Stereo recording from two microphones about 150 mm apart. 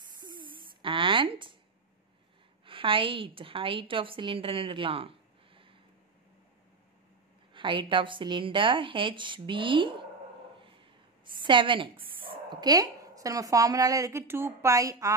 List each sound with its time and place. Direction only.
0.2 s a sound: 30° right (ahead or behind)
2.6 s a woman's voice: 35° right (ahead or behind)
7.5 s a woman's voice: 35° right (ahead or behind)
11.4 s a woman's voice: 35° right (ahead or behind)